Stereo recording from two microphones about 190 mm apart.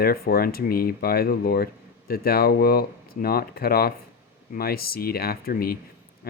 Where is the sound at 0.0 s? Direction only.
55° left (ahead or behind).